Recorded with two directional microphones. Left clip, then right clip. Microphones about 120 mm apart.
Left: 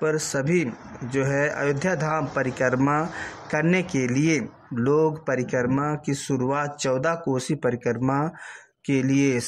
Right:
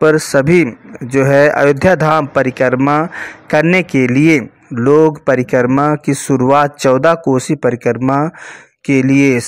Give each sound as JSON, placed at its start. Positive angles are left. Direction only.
{"t": 0.0, "sound": "a man's voice", "side_deg": -40}